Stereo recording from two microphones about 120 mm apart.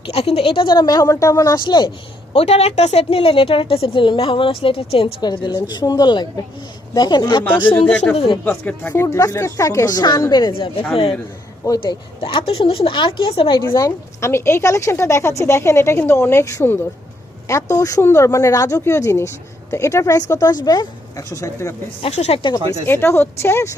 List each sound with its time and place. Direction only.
0.0 s speech: 60° left (ahead or behind); by 1.9 s 40° left (ahead or behind)
2.3 s a woman's voice: 60° left (ahead or behind)
5.2 s speech: 35° left (ahead or behind)
7.9 s speech: 10° left (ahead or behind)
8.1 s a woman's voice: 55° left (ahead or behind)
8.4 s a woman's voice: 15° left (ahead or behind); by 13.6 s 45° left (ahead or behind)
13.6 s a woman's voice: 25° left (ahead or behind)
22.0 s speech: 65° left (ahead or behind)
22.5 s a woman's voice: 20° left (ahead or behind)